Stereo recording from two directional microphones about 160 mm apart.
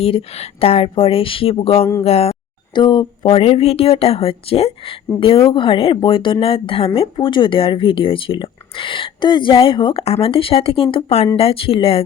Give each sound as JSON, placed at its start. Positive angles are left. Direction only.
{"t": 0.0, "sound": "speech", "side_deg": 35}